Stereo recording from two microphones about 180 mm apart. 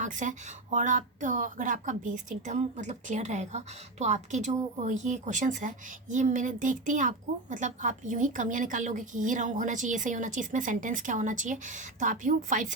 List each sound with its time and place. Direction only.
0.0 s speech: 45° right (ahead or behind)